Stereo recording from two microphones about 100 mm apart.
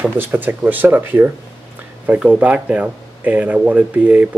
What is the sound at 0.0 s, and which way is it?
Speech, 20° right (ahead or behind).